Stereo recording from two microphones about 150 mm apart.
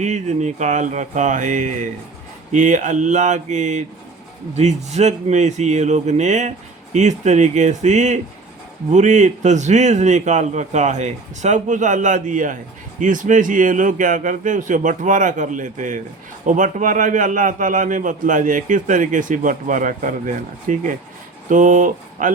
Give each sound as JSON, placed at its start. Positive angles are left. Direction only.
{"t": 0.0, "sound": "a man's voice", "side_deg": -50}